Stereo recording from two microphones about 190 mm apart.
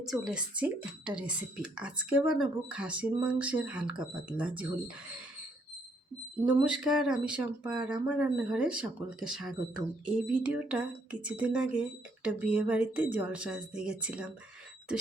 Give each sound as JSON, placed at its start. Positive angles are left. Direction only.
{"t": 0.0, "sound": "speech", "side_deg": 0}
{"t": 6.4, "sound": "speech", "side_deg": -5}